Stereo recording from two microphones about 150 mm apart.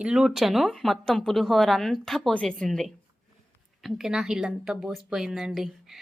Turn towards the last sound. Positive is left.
turn(degrees=0)  # may be behind; listen again after turning